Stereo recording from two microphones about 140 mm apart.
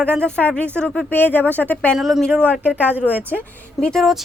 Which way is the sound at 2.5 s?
10° right (ahead or behind).